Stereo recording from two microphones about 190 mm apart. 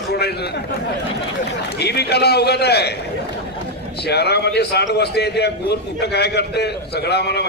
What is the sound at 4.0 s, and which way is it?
A man's voice, 60° left (ahead or behind).